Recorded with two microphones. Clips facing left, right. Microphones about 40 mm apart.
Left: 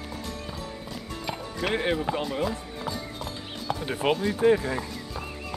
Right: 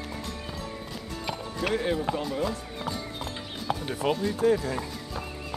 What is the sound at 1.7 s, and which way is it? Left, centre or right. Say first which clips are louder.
Run: left 1 dB; left.